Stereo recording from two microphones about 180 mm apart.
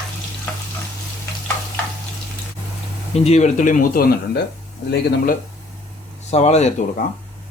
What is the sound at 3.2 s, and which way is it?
Speech, 40° left (ahead or behind).